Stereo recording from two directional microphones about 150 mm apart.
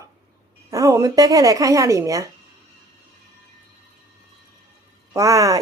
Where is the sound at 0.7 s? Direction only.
20° right (ahead or behind).